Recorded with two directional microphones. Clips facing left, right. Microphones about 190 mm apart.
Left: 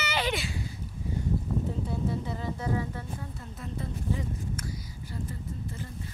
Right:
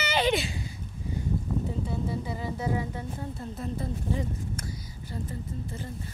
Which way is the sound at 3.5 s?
35° right (ahead or behind).